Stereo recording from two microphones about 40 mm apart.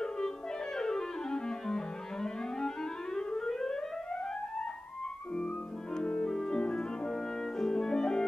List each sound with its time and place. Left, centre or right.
0.7 s music: centre
5.9 s music: centre